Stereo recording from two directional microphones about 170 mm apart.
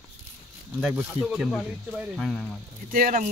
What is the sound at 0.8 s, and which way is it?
Speech, 5° right (ahead or behind).